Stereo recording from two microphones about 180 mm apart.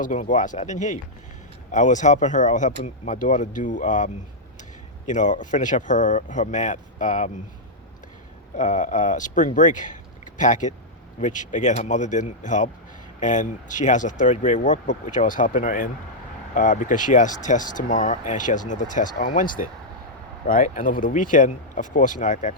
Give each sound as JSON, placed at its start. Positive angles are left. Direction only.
{"t": 0.0, "sound": "speech", "side_deg": 45}
{"t": 8.5, "sound": "speech", "side_deg": 45}